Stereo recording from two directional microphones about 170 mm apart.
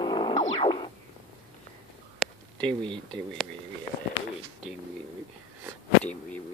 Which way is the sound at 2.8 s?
30° right (ahead or behind).